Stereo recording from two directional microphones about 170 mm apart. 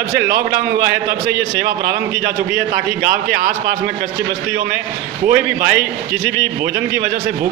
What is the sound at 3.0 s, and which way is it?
Speech, 55° right (ahead or behind).